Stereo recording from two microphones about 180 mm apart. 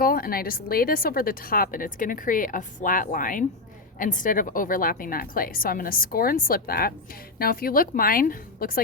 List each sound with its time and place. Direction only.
0.0 s a woman's voice: 55° left (ahead or behind)